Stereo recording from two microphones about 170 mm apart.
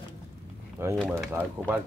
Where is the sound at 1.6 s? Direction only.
5° right (ahead or behind).